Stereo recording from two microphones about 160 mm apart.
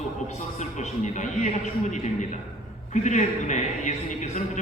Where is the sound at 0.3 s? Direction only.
45° left (ahead or behind).